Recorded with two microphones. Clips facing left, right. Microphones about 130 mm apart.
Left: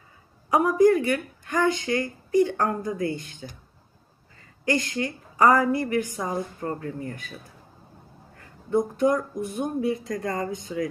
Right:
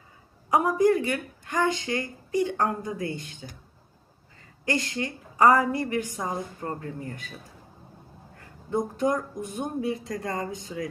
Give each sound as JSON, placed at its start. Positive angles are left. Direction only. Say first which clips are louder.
{"t": 0.5, "sound": "speech", "louder": "left 3 dB", "side_deg": -25}
{"t": 4.6, "sound": "speech", "louder": "left 3 dB", "side_deg": -25}
{"t": 8.7, "sound": "speech", "louder": "left 4 dB", "side_deg": -25}